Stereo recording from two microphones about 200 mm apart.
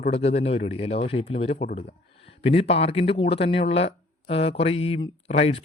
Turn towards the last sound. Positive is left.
turn(degrees=30)  # may be behind; listen again after turning